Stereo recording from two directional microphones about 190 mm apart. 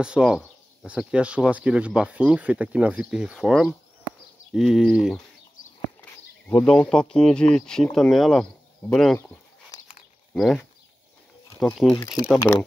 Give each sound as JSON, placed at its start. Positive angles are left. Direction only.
{"t": 0.0, "sound": "speech", "side_deg": -5}
{"t": 6.5, "sound": "speech", "side_deg": 5}
{"t": 9.2, "sound": "a sound", "side_deg": 15}
{"t": 10.3, "sound": "speech", "side_deg": 5}
{"t": 11.6, "sound": "speech", "side_deg": 5}
{"t": 12.4, "sound": "speech", "side_deg": 20}